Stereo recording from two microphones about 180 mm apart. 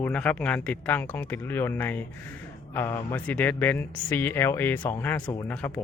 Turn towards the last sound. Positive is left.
turn(degrees=10)  # may be behind; listen again after turning